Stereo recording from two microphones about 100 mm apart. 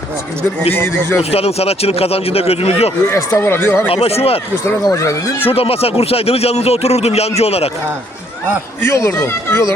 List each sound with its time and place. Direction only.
0.7 s speech: 20° left (ahead or behind)
1.2 s speech: 90° left
3.1 s speech: 25° left (ahead or behind)
3.8 s speech: 75° left (ahead or behind)
4.9 s speech: 35° left (ahead or behind)
5.4 s speech: 75° left (ahead or behind); by 7.7 s 90° left
8.8 s speech: 25° left (ahead or behind)